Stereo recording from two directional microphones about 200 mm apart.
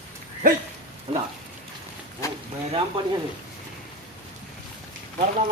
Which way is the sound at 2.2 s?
15° left (ahead or behind).